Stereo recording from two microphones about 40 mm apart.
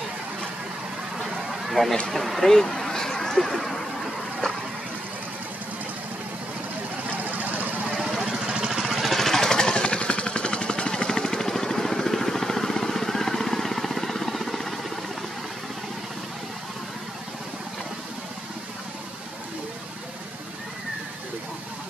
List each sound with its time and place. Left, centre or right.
1.1 s a sound: centre
2.0 s speech: centre
7.2 s vehicle: right
8.0 s vehicle: centre
9.0 s vehicle: centre